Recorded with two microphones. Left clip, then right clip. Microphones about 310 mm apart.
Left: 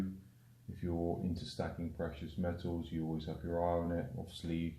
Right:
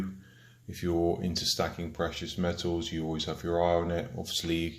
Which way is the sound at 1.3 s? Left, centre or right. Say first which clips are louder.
Right 12 dB; right.